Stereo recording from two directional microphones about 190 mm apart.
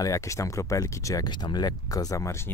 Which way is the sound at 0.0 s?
15° left (ahead or behind).